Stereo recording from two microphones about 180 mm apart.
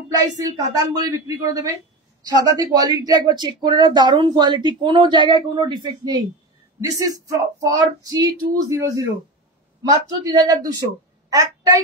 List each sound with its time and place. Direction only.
0.4 s speech: 20° right (ahead or behind)